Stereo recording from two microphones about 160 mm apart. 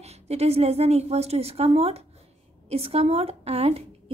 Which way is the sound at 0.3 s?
40° right (ahead or behind).